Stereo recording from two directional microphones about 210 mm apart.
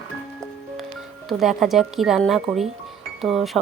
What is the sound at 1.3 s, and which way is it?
Speech, centre (ahead or behind).